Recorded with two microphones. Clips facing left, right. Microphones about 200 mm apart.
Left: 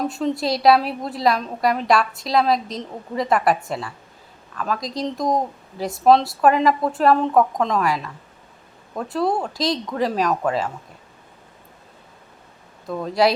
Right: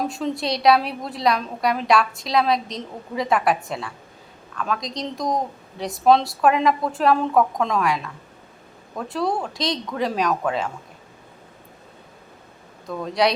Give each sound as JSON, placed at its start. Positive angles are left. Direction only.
{"t": 0.0, "sound": "a woman's voice", "side_deg": 0}
{"t": 12.9, "sound": "a woman's voice", "side_deg": 0}